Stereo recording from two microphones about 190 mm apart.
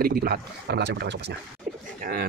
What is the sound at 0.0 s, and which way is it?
Speech, 55° right (ahead or behind).